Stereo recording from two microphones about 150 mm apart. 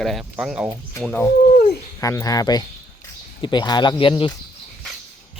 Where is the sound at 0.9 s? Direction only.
10° left (ahead or behind).